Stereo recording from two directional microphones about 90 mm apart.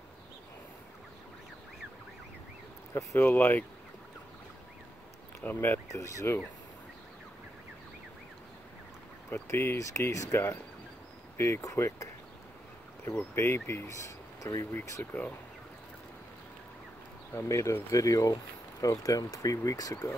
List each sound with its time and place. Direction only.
2.9 s speech: 35° left (ahead or behind)
3.2 s speech: 25° left (ahead or behind)
5.4 s speech: 20° left (ahead or behind)
5.9 s speech: 35° left (ahead or behind)
9.3 s speech: 30° left (ahead or behind)
13.2 s speech: 30° left (ahead or behind)
15.1 s speech: 20° left (ahead or behind)
17.3 s speech: 30° left (ahead or behind)